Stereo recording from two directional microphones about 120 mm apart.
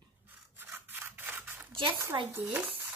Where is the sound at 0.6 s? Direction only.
15° right (ahead or behind).